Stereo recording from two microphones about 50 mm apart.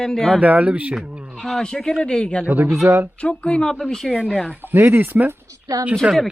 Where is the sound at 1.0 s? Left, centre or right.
Right.